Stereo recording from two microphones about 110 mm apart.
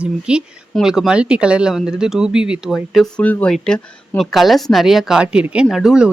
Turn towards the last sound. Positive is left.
turn(degrees=-5)  # may be behind; listen again after turning